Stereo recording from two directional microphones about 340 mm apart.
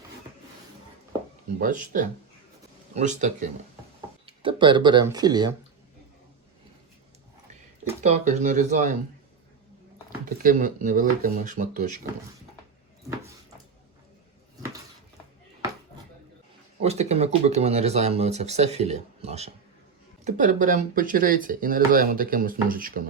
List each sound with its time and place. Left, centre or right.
1.5 s speech: right
7.9 s speech: centre
10.2 s speech: right
16.8 s speech: centre